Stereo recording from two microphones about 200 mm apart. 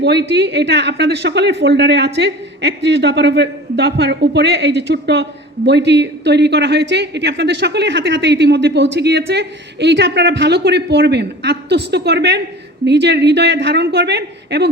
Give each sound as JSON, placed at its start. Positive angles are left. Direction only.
{"t": 0.0, "sound": "speech", "side_deg": -60}